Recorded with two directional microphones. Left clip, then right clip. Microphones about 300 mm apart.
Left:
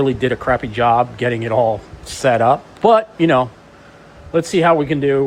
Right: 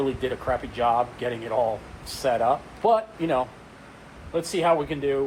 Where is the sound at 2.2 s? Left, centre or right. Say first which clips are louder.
Left 9 dB; left.